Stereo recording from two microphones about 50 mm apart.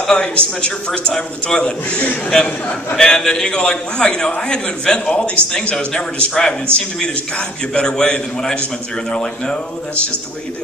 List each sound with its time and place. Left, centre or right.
0.0 s a man's voice: centre
3.0 s a man's voice: centre